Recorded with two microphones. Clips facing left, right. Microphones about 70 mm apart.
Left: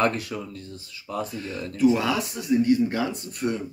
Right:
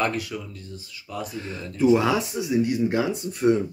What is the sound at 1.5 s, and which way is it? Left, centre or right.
Speech, right.